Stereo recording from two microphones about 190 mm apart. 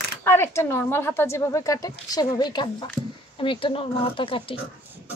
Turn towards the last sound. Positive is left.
turn(degrees=25)  # may be behind; listen again after turning